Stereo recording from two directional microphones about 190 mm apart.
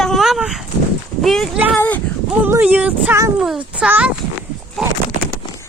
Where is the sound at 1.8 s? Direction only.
10° left (ahead or behind).